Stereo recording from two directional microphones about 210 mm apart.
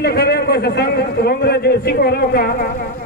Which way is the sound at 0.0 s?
50° left (ahead or behind).